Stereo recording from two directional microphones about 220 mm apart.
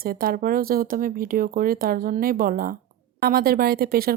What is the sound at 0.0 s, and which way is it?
Speech, 40° right (ahead or behind).